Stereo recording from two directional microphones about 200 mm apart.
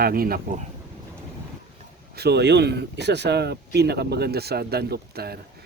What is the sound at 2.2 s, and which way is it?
Speech, 55° right (ahead or behind).